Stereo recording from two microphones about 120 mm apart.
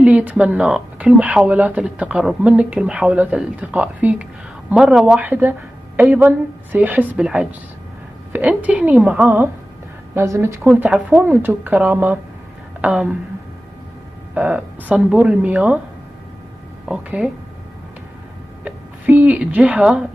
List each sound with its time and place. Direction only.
0.0 s speech: 10° right (ahead or behind)
10.1 s speech: 25° right (ahead or behind)
10.7 s speech: 10° right (ahead or behind)
14.3 s speech: 10° right (ahead or behind)
16.8 s speech: 10° right (ahead or behind)
18.6 s speech: 15° right (ahead or behind)